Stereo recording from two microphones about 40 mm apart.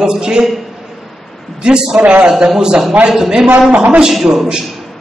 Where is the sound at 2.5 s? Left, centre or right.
Right.